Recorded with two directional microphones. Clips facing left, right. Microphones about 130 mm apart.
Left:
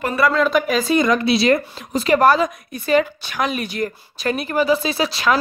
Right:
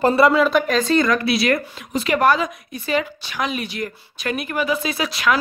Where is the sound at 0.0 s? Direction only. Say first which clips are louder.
Right 4 dB; 30° right (ahead or behind).